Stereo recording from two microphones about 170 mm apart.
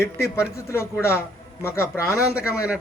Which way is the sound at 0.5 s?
15° left (ahead or behind).